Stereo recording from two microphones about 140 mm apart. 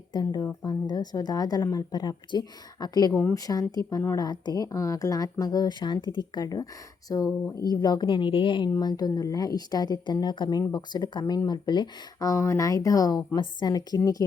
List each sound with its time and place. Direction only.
0.1 s speech: 30° left (ahead or behind)